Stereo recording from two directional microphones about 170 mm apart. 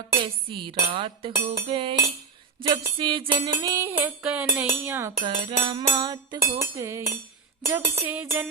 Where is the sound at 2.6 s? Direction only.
25° right (ahead or behind).